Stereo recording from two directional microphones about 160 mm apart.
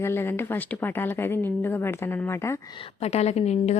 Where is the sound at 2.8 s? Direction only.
40° left (ahead or behind).